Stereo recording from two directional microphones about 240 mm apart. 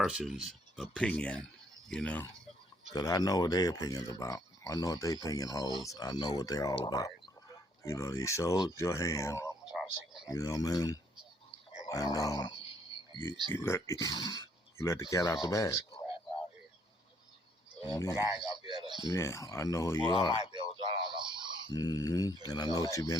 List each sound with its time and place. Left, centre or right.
0.0 s speech: centre
2.9 s speech: centre
9.6 s a sound: centre
10.2 s speech: centre
17.9 s speech: centre
18.7 s speech: centre
19.1 s speech: centre
20.3 s a sound: centre
21.7 s speech: centre